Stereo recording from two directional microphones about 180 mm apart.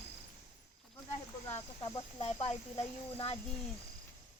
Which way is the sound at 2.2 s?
35° left (ahead or behind).